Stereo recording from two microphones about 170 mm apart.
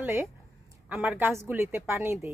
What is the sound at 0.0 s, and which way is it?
Speech, 10° right (ahead or behind).